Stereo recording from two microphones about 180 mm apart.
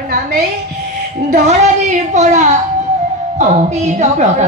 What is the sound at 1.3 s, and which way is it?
A woman's voice, 40° right (ahead or behind).